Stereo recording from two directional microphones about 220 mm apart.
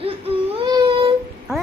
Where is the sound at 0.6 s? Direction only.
20° right (ahead or behind).